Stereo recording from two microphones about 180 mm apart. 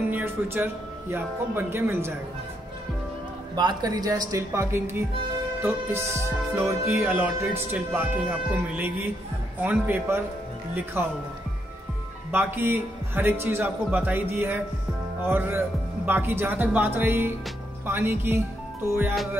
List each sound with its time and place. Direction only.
0.1 s speech: 10° right (ahead or behind)
3.5 s speech: 20° right (ahead or behind)
12.3 s speech: 10° right (ahead or behind)